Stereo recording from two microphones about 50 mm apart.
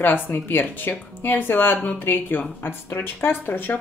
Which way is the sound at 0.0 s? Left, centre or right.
Left.